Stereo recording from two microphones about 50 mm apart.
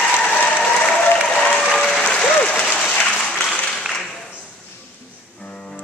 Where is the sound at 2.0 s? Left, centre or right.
Centre.